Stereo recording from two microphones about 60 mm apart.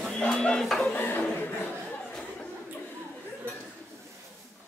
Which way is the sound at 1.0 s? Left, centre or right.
Left.